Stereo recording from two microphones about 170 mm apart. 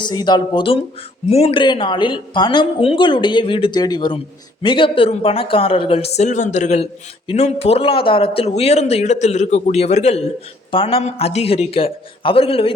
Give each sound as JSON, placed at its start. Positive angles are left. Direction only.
{"t": 0.0, "sound": "speech", "side_deg": 25}